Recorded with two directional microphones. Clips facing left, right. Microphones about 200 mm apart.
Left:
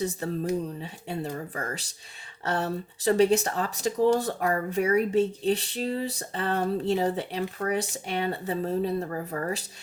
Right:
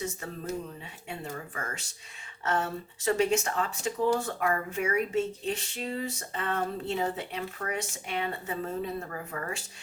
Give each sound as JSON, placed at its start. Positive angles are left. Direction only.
{"t": 0.0, "sound": "speech", "side_deg": 35}